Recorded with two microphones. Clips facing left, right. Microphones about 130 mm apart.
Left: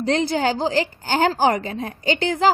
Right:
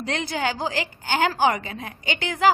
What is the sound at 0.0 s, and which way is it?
A woman's voice, 30° left (ahead or behind).